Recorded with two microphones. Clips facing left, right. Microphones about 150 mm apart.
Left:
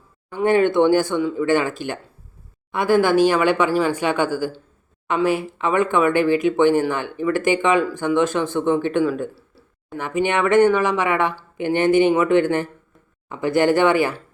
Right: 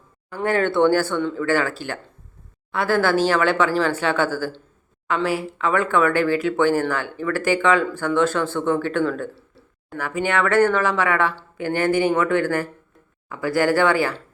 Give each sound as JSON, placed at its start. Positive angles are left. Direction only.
{"t": 0.3, "sound": "speech", "side_deg": 15}
{"t": 9.3, "sound": "a sound", "side_deg": 5}
{"t": 10.0, "sound": "speech", "side_deg": 20}